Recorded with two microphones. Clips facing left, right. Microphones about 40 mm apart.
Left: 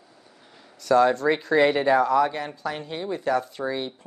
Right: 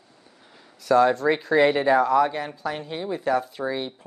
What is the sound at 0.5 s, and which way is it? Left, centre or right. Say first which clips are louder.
Speech: even; centre.